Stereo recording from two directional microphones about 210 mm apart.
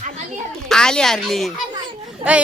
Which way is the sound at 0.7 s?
5° left (ahead or behind).